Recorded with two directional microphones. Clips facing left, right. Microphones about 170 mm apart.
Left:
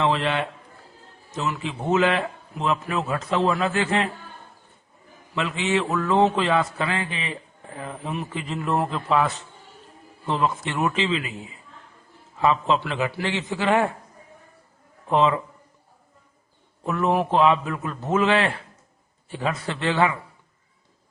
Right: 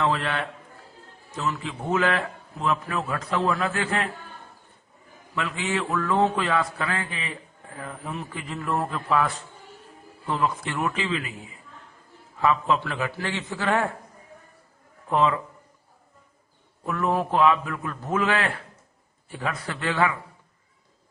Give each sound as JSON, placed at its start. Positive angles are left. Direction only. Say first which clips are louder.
{"t": 0.0, "sound": "a man's voice", "louder": "left 3 dB", "side_deg": 20}
{"t": 5.3, "sound": "a man's voice", "louder": "left 4 dB", "side_deg": 20}
{"t": 12.4, "sound": "a man's voice", "louder": "left 2 dB", "side_deg": 25}
{"t": 15.1, "sound": "a man's voice", "louder": "left 2 dB", "side_deg": 20}
{"t": 16.8, "sound": "a man's voice", "louder": "left 3 dB", "side_deg": 20}